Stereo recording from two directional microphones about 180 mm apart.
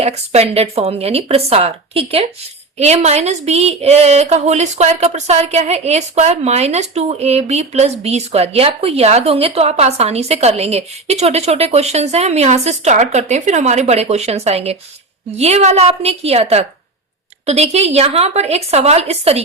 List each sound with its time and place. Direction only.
0.0 s speech: 35° right (ahead or behind)